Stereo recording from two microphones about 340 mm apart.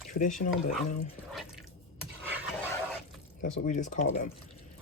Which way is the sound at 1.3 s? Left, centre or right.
Centre.